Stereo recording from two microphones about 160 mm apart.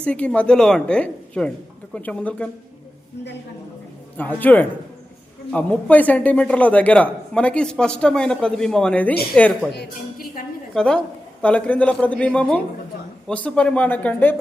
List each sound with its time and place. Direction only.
0.0 s a man's voice: 5° left (ahead or behind)
4.2 s a man's voice: 10° left (ahead or behind)
9.7 s a woman's voice: 65° left (ahead or behind)
10.8 s a woman's voice: 5° left (ahead or behind)